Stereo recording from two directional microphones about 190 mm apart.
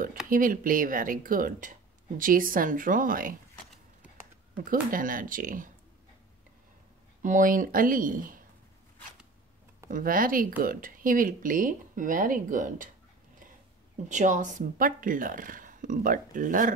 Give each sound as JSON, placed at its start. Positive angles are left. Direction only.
{"t": 0.3, "sound": "speech", "side_deg": -45}
{"t": 4.9, "sound": "speech", "side_deg": -45}
{"t": 7.2, "sound": "speech", "side_deg": -40}
{"t": 9.8, "sound": "speech", "side_deg": -45}
{"t": 14.0, "sound": "speech", "side_deg": -40}